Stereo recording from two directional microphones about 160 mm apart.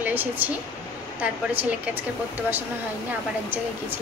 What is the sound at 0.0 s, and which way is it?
A woman's voice, 10° right (ahead or behind).